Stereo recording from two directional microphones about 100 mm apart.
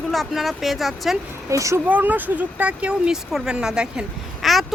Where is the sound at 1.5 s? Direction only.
30° right (ahead or behind).